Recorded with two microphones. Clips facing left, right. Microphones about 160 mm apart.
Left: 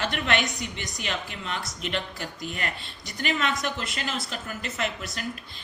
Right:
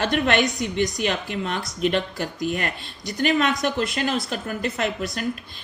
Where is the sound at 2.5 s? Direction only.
45° right (ahead or behind).